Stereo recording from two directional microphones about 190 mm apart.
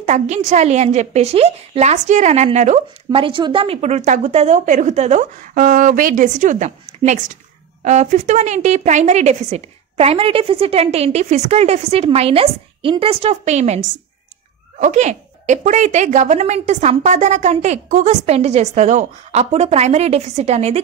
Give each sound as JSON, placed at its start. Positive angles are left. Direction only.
{"t": 0.0, "sound": "a woman's voice", "side_deg": -40}